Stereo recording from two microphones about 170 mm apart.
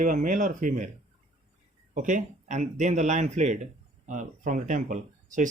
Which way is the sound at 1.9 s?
50° right (ahead or behind).